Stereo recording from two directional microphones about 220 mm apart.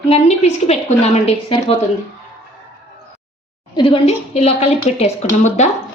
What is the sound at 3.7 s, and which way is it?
A woman's voice, 25° left (ahead or behind).